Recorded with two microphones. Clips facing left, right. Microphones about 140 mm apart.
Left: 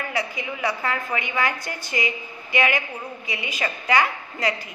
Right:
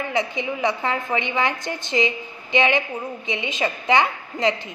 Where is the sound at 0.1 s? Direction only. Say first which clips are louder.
Right 4 dB; 20° right (ahead or behind).